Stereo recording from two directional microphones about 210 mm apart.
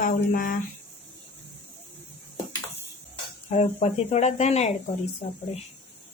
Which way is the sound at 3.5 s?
30° left (ahead or behind).